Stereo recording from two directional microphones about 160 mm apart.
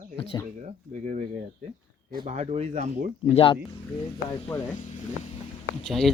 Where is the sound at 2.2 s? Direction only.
45° right (ahead or behind).